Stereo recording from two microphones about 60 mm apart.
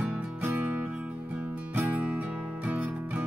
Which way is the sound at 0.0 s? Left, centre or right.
Right.